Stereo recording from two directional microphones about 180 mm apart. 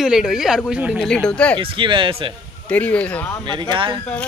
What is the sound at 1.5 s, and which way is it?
Speech, 25° right (ahead or behind).